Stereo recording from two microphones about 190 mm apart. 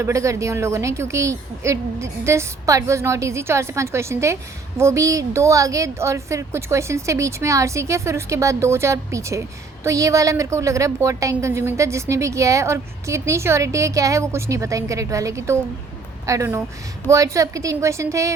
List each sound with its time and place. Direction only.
0.0 s a woman's voice: 15° right (ahead or behind)